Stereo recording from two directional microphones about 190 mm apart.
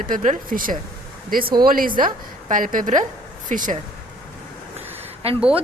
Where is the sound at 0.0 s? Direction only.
40° right (ahead or behind).